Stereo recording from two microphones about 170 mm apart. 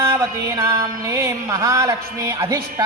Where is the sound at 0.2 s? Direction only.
20° right (ahead or behind).